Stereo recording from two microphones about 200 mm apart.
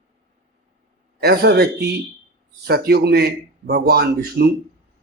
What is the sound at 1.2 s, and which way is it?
Speech, 55° right (ahead or behind).